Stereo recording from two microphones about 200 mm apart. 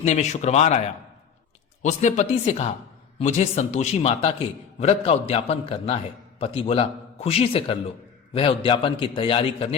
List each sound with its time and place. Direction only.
0.0 s speech: 35° left (ahead or behind)
1.8 s a man's voice: 35° left (ahead or behind)